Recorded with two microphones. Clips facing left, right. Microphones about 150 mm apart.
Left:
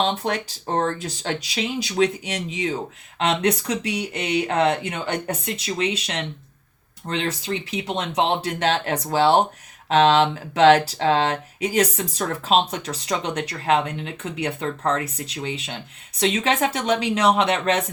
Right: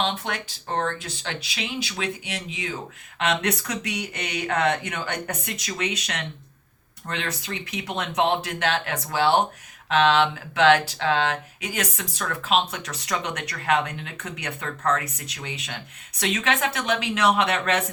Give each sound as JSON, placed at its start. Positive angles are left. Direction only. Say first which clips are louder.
{"t": 0.0, "sound": "speech", "louder": "left 4 dB", "side_deg": 40}